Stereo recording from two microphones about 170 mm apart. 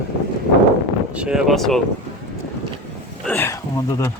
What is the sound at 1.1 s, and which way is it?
Speech, 5° right (ahead or behind).